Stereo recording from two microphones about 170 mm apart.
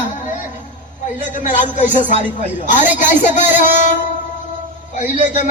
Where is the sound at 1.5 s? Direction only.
45° left (ahead or behind).